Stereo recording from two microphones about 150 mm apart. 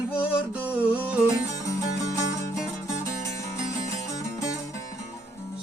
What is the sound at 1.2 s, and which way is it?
Music, 20° left (ahead or behind).